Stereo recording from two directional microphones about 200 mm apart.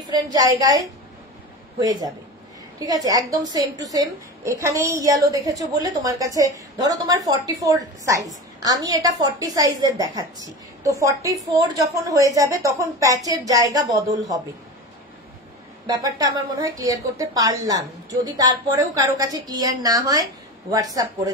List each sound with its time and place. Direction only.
0.1 s a woman's voice: 20° right (ahead or behind)
15.9 s a woman's voice: 20° right (ahead or behind)